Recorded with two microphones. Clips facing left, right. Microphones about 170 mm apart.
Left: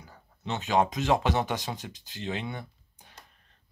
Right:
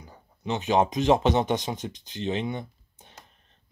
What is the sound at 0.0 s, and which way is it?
Speech, 20° right (ahead or behind).